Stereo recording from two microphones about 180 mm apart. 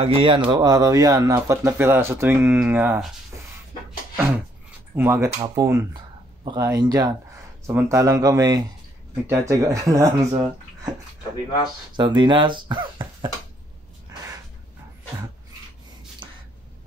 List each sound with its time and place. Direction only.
0.0 s speech: 30° right (ahead or behind); by 3.1 s 10° right (ahead or behind)
4.9 s speech: 15° right (ahead or behind)
12.0 s speech: 25° right (ahead or behind)
16.2 s a sound: 25° right (ahead or behind)